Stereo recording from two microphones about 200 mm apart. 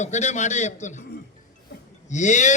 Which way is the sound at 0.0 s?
35° left (ahead or behind).